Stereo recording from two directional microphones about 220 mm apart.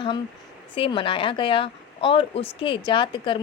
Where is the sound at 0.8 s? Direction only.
25° left (ahead or behind).